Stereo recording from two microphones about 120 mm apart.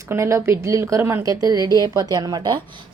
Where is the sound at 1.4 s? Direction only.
35° right (ahead or behind).